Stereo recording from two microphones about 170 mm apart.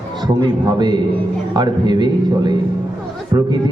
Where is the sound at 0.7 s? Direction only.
25° right (ahead or behind).